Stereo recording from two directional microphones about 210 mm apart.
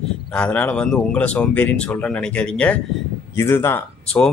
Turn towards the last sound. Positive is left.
turn(degrees=10)  # may be behind; listen again after turning